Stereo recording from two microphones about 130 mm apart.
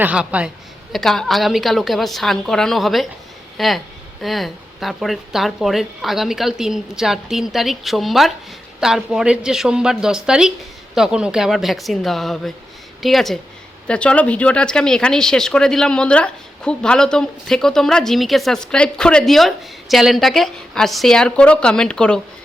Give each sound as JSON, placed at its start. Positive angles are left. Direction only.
{"t": 0.0, "sound": "a woman's voice", "side_deg": -10}
{"t": 0.9, "sound": "speech", "side_deg": 0}